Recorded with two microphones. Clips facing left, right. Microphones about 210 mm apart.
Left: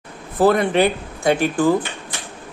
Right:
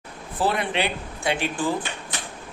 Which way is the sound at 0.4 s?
45° left (ahead or behind).